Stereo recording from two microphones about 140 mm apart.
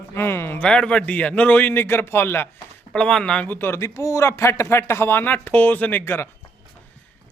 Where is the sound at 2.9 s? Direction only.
5° left (ahead or behind).